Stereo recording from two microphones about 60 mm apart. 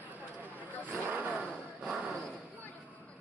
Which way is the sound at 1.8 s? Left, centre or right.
Right.